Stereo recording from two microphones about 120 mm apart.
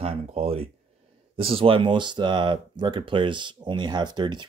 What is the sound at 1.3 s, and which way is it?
Speech, 50° right (ahead or behind).